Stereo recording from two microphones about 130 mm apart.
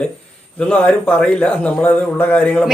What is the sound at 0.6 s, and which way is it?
A man's voice, 10° left (ahead or behind).